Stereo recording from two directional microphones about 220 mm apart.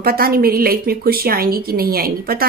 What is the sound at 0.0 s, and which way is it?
Speech, 45° right (ahead or behind).